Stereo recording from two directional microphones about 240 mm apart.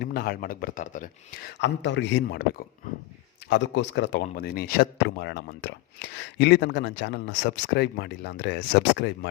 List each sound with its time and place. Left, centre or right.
0.0 s speech: left
1.5 s speech: left